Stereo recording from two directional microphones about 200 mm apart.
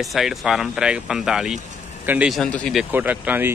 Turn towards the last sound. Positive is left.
turn(degrees=-10)  # may be behind; listen again after turning